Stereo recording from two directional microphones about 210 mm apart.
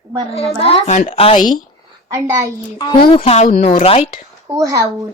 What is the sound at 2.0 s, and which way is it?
Speech, 15° right (ahead or behind).